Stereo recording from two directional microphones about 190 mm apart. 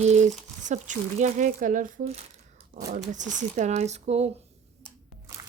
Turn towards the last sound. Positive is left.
turn(degrees=-35)  # may be behind; listen again after turning